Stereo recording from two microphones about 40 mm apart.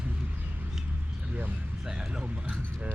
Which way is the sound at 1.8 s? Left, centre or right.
Centre.